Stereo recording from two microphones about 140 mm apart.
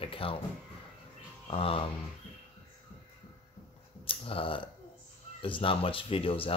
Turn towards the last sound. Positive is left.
turn(degrees=40)  # may be behind; listen again after turning